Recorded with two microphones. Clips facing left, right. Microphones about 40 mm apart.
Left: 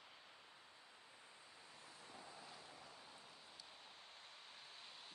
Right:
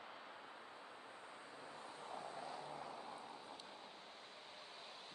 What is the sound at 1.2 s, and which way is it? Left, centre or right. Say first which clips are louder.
Vehicle: right 8 dB; right.